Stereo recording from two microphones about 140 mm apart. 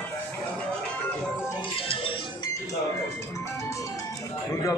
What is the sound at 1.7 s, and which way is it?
Music, 40° left (ahead or behind).